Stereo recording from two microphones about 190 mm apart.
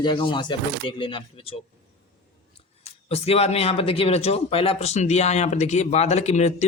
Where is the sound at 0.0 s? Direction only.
25° left (ahead or behind).